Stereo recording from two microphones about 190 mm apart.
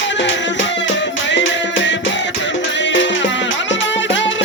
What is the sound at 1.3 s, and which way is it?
Music, 75° left (ahead or behind).